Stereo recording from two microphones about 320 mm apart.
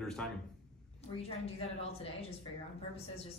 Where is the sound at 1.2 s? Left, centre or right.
Centre.